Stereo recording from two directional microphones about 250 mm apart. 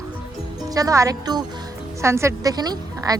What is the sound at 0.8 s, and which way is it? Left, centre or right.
Speech, centre.